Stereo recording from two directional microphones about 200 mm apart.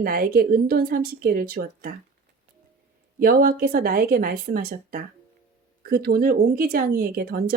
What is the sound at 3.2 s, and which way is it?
A woman's voice, 45° right (ahead or behind).